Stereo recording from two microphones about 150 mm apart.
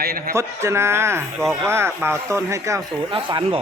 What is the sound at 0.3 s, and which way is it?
A man's voice, 20° right (ahead or behind).